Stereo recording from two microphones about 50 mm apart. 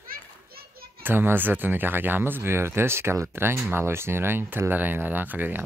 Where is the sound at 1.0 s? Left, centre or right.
Right.